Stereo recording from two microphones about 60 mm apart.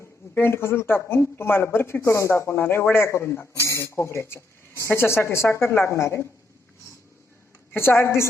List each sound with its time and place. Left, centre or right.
0.3 s speech: left
2.6 s a woman's voice: left
7.8 s a woman's voice: left